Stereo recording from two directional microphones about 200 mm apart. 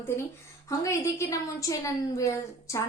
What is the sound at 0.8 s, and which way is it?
A woman's voice, 15° left (ahead or behind).